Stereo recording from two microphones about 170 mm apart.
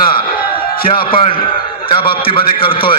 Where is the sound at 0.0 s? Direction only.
30° left (ahead or behind).